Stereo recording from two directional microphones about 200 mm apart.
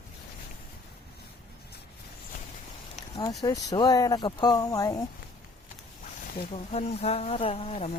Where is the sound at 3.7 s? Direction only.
20° left (ahead or behind).